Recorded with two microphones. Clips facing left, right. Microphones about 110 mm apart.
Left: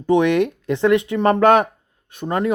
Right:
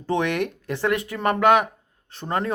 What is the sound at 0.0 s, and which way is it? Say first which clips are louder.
Speech: left 8 dB; 20° left (ahead or behind).